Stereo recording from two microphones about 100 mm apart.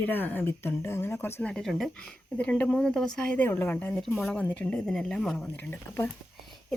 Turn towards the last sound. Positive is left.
turn(degrees=20)  # may be behind; listen again after turning